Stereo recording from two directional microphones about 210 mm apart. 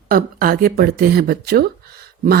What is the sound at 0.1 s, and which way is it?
Speech, 45° right (ahead or behind).